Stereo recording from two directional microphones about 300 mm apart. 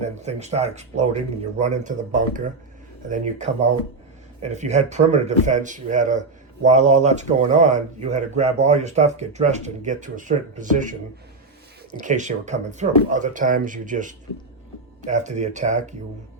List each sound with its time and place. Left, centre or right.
0.0 s speech: right
3.1 s speech: right
11.9 s speech: right